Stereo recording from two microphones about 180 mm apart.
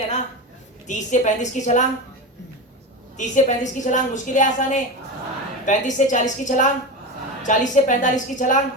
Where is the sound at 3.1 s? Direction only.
45° left (ahead or behind).